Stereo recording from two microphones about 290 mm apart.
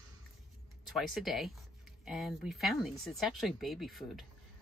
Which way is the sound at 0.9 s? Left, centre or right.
Centre.